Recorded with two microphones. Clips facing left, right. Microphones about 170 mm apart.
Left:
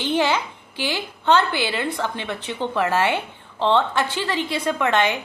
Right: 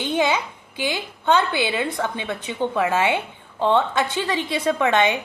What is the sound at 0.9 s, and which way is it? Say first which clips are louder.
A woman's voice: left 1 dB; 15° right (ahead or behind).